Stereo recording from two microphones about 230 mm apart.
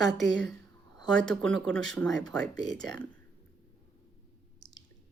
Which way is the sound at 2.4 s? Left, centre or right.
Right.